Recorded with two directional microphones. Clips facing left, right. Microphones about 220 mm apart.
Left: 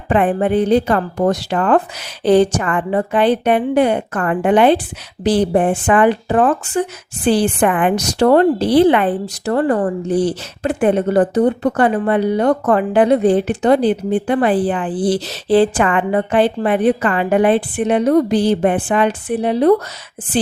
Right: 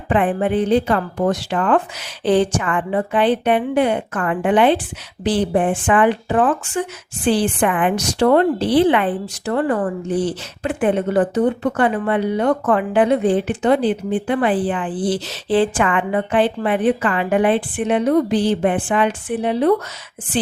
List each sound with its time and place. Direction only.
0.1 s a woman's voice: 40° left (ahead or behind)